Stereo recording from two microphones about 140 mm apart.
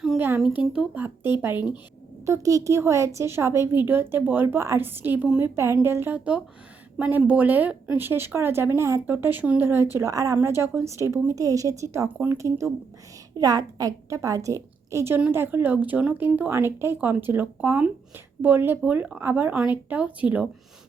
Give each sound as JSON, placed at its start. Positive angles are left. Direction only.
{"t": 0.2, "sound": "a woman's voice", "side_deg": -10}